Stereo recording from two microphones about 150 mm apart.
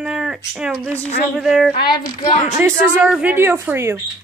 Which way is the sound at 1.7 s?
30° left (ahead or behind).